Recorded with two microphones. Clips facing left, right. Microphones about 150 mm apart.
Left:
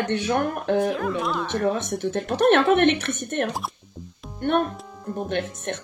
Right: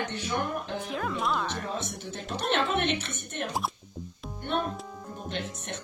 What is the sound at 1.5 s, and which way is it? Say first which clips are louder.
Speech: left 11 dB; 60° left (ahead or behind).